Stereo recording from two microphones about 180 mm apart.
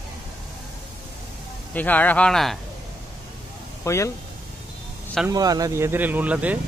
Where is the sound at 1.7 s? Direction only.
10° left (ahead or behind).